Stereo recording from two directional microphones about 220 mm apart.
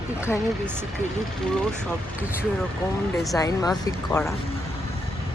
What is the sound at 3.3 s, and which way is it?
Speech, 15° left (ahead or behind).